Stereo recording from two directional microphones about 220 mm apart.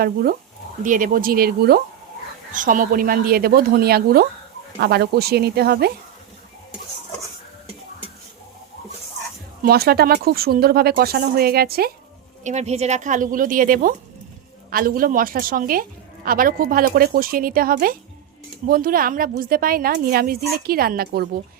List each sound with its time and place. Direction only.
0.0 s a woman's voice: 40° right (ahead or behind)
9.6 s speech: 45° right (ahead or behind)
12.4 s a woman's voice: 30° right (ahead or behind)